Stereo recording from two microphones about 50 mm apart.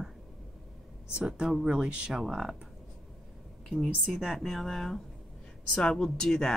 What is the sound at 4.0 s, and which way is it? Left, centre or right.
Speech, centre.